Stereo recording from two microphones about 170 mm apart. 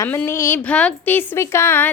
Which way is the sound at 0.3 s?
15° left (ahead or behind).